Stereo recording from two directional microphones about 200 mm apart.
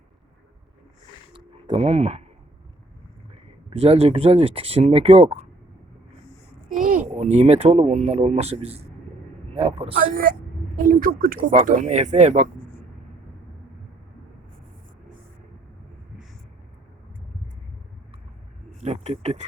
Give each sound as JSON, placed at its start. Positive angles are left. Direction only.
{"t": 1.3, "sound": "a sound", "side_deg": -25}
{"t": 3.7, "sound": "speech", "side_deg": -30}
{"t": 6.7, "sound": "speech", "side_deg": -45}
{"t": 10.8, "sound": "a woman's voice", "side_deg": -45}
{"t": 18.8, "sound": "speech", "side_deg": -30}